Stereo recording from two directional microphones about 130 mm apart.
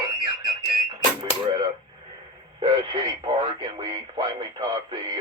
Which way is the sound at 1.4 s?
40° right (ahead or behind).